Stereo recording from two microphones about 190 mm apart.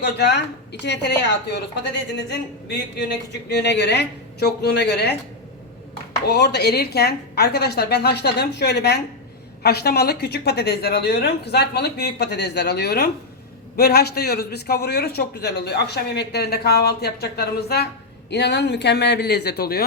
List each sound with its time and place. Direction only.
0.0 s a man's voice: 60° left (ahead or behind)
3.6 s a man's voice: 65° left (ahead or behind)
6.2 s a man's voice: 60° left (ahead or behind)